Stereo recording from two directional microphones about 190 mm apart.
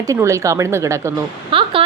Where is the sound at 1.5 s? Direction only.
30° right (ahead or behind).